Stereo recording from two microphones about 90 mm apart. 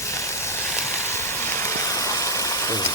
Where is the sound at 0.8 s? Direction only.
30° left (ahead or behind).